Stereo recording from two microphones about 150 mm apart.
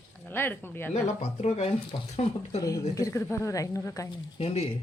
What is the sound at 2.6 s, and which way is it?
A woman's voice, 25° left (ahead or behind).